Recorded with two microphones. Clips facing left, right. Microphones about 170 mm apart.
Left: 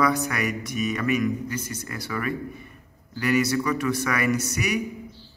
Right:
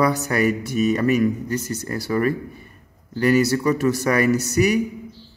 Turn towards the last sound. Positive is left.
turn(degrees=-35)  # may be behind; listen again after turning